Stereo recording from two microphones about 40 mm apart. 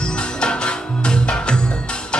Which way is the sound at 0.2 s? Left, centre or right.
Left.